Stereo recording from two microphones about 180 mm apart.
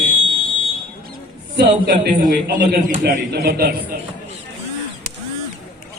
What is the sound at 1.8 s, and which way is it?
A man's voice, 50° right (ahead or behind).